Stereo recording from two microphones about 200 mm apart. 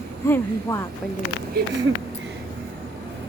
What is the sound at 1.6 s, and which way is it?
Speech, 55° right (ahead or behind).